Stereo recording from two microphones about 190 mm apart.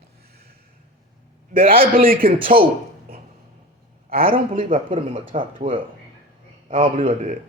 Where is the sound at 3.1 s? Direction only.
50° right (ahead or behind).